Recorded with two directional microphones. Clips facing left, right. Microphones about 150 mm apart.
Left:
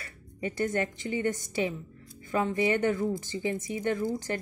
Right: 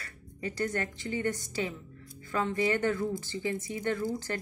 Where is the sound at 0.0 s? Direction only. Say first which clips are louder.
Left 3 dB; 20° left (ahead or behind).